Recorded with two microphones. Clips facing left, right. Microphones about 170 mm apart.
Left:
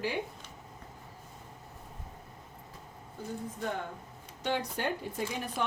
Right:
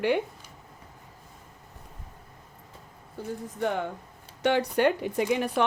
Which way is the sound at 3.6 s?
75° right (ahead or behind).